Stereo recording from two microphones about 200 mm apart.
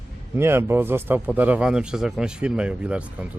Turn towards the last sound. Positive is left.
turn(degrees=-5)  # may be behind; listen again after turning